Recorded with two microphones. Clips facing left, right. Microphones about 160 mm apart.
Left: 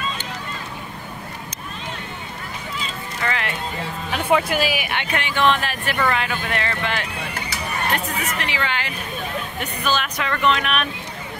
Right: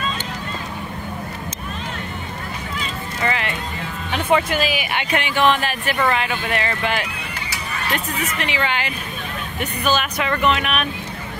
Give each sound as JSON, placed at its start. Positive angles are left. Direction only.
{"t": 3.3, "sound": "music", "side_deg": -5}
{"t": 4.1, "sound": "speech", "side_deg": 5}
{"t": 5.1, "sound": "speech", "side_deg": -10}
{"t": 8.4, "sound": "speech", "side_deg": -20}